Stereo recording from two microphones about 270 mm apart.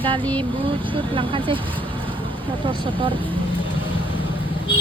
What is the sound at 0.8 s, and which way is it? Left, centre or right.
Speech, centre.